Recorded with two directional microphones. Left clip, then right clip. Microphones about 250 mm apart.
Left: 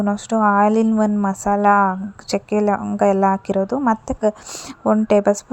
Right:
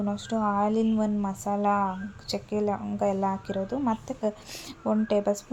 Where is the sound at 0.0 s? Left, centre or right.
Left.